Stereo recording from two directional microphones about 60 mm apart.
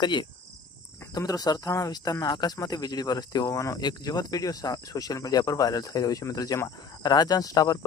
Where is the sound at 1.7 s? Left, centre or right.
Left.